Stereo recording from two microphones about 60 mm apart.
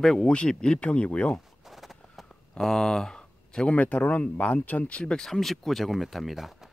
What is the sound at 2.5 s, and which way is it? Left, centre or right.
Speech, centre.